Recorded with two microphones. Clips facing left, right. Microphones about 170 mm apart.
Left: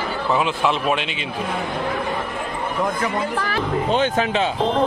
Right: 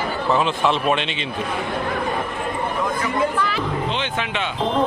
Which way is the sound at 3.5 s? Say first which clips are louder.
Left 4 dB; 45° left (ahead or behind).